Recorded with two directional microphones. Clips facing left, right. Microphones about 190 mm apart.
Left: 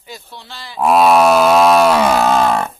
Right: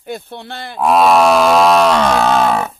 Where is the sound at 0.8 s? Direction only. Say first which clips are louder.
Even; centre (ahead or behind).